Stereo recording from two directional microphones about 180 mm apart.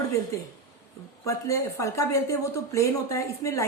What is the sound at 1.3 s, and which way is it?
Speech, 15° left (ahead or behind).